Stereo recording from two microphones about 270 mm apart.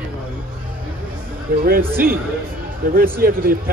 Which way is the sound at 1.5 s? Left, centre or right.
Right.